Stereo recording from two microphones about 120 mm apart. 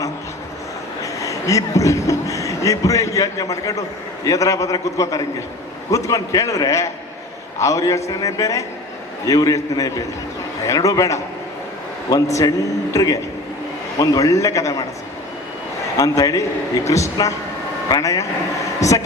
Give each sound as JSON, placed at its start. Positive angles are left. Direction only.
{"t": 1.0, "sound": "a man's voice", "side_deg": 25}
{"t": 16.0, "sound": "a man's voice", "side_deg": 30}